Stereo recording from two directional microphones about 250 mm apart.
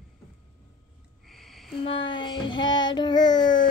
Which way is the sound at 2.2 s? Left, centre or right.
Centre.